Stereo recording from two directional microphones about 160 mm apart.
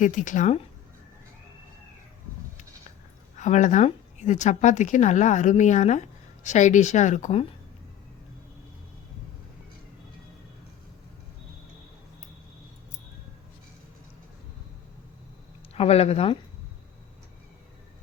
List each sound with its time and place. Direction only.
0.0 s speech: 55° left (ahead or behind)
3.3 s speech: 50° left (ahead or behind)
15.7 s speech: 40° left (ahead or behind)